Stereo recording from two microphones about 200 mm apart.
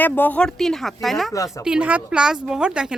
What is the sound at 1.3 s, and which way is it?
Speech, 15° left (ahead or behind).